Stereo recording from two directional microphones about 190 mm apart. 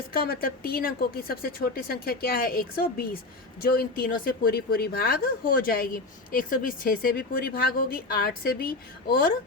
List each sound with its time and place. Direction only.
0.1 s speech: 50° left (ahead or behind)